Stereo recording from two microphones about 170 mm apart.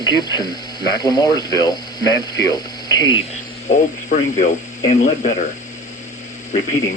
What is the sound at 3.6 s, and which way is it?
Speech, 45° left (ahead or behind).